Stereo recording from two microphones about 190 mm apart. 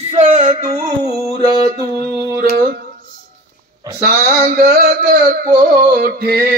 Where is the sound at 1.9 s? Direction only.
55° right (ahead or behind).